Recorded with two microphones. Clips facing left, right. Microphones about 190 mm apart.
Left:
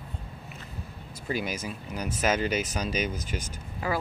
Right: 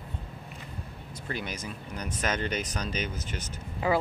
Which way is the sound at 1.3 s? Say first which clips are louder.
Left 5 dB; 10° left (ahead or behind).